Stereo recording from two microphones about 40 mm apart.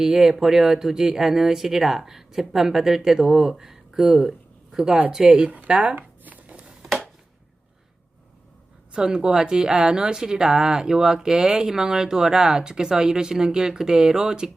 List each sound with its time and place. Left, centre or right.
0.0 s speech: centre
5.3 s speech: right
6.0 s a sound: right
8.9 s speech: centre